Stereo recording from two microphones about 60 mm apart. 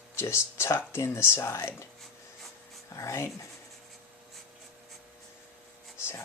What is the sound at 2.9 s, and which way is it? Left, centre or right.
Speech, left.